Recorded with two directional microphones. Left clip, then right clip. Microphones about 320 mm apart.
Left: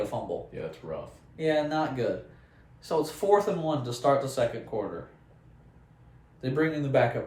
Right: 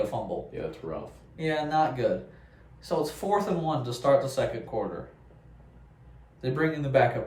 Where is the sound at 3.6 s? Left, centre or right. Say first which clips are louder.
Even; centre.